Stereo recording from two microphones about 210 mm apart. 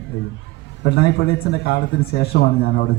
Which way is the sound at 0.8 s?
55° left (ahead or behind).